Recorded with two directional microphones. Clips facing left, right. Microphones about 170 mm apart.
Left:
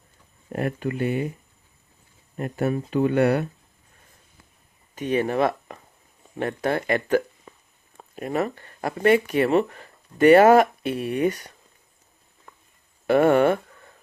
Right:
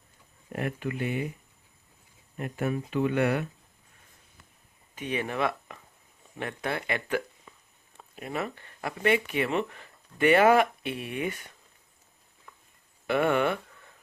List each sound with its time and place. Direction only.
0.5 s speech: 40° left (ahead or behind)
2.3 s speech: 40° left (ahead or behind)
4.9 s speech: 40° left (ahead or behind)
12.5 s a sound: 45° left (ahead or behind)
13.1 s speech: 40° left (ahead or behind)